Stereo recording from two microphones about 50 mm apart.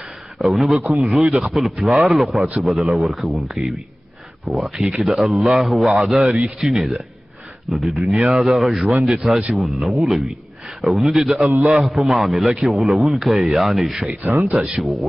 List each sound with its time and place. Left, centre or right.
0.4 s a man's voice: centre
11.1 s a man's voice: centre
11.4 s a man's voice: right
11.8 s a man's voice: centre